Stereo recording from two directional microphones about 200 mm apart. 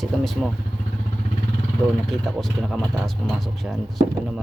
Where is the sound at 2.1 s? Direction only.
Centre (ahead or behind).